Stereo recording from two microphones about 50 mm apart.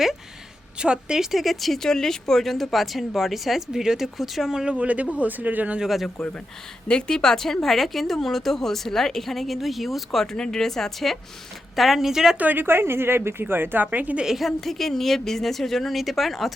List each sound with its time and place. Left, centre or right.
0.8 s a woman's voice: centre
1.2 s speech: centre
4.8 s a woman's voice: right
5.8 s speech: centre
6.8 s speech: centre
10.3 s a woman's voice: centre
12.4 s speech: right
12.6 s speech: right
13.8 s speech: right
14.3 s speech: centre